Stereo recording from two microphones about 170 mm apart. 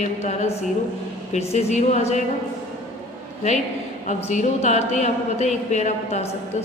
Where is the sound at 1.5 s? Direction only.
40° left (ahead or behind).